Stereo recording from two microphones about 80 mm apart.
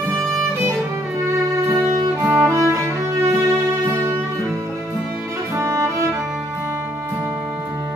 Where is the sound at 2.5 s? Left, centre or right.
Right.